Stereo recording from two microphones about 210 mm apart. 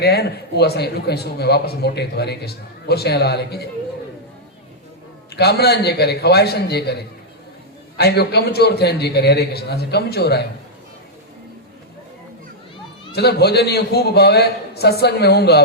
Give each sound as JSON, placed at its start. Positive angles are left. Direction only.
{"t": 0.0, "sound": "a man's voice", "side_deg": 50}
{"t": 5.3, "sound": "a man's voice", "side_deg": 50}
{"t": 13.1, "sound": "a man's voice", "side_deg": 50}